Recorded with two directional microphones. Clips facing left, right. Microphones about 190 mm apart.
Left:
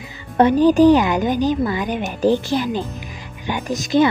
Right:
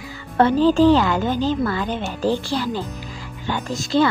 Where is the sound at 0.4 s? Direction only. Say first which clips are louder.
Left 3 dB; 15° left (ahead or behind).